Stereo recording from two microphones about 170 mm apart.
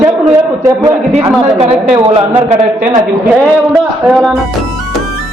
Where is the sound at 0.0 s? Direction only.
15° right (ahead or behind).